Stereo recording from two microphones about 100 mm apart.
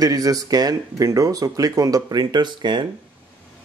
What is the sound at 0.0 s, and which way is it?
Speech, 40° right (ahead or behind).